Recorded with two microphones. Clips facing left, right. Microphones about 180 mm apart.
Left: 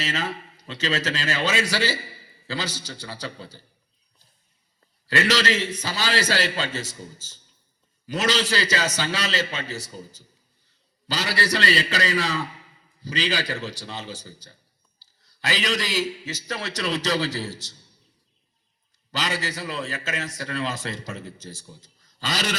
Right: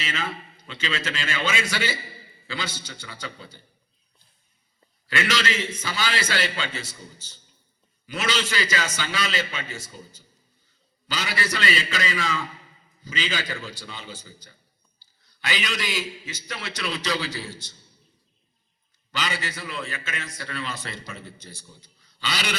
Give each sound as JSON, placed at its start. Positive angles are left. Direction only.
{"t": 0.0, "sound": "a man's voice", "side_deg": 40}
{"t": 5.0, "sound": "a man's voice", "side_deg": 40}
{"t": 19.1, "sound": "a man's voice", "side_deg": 40}